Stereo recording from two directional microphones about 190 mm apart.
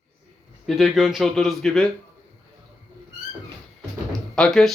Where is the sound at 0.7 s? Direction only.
Centre (ahead or behind).